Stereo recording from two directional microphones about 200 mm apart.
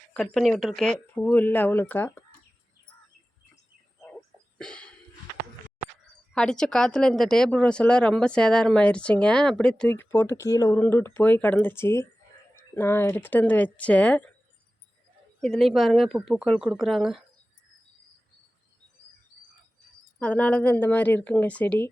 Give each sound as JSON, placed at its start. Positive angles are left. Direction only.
{"t": 0.1, "sound": "speech", "side_deg": 5}
{"t": 4.0, "sound": "a sound", "side_deg": 5}
{"t": 6.3, "sound": "speech", "side_deg": 5}
{"t": 15.4, "sound": "speech", "side_deg": 0}
{"t": 20.1, "sound": "speech", "side_deg": 5}